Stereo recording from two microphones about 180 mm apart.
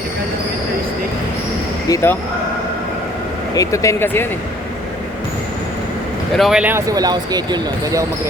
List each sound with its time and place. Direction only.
1.9 s speech: 15° left (ahead or behind)
3.5 s speech: 20° left (ahead or behind)
6.3 s speech: centre (ahead or behind); by 8.0 s 20° right (ahead or behind)